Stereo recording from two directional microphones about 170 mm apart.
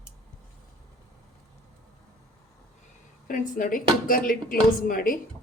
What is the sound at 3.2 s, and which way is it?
A woman's voice, 55° left (ahead or behind).